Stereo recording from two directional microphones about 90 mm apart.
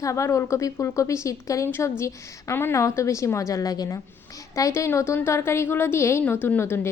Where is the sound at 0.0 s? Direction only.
35° left (ahead or behind).